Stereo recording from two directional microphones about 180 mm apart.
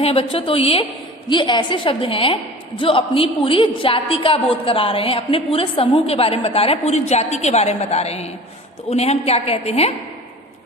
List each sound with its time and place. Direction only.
0.0 s a woman's voice: 30° left (ahead or behind)